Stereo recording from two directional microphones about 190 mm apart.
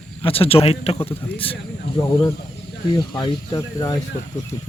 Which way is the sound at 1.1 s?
10° left (ahead or behind).